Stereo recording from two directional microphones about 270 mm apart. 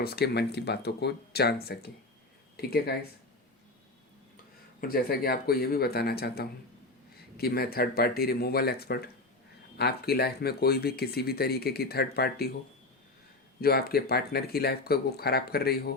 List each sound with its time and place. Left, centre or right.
0.0 s speech: left
4.8 s speech: left
13.6 s speech: left